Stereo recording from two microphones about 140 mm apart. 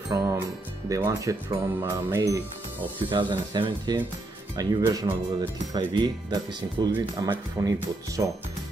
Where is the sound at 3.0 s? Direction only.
35° right (ahead or behind).